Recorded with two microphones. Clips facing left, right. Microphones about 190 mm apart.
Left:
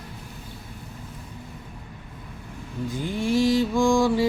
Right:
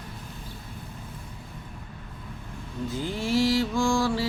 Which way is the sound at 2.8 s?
15° left (ahead or behind).